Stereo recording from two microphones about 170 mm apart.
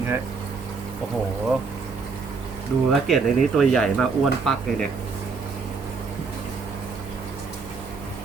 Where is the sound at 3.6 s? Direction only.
5° left (ahead or behind).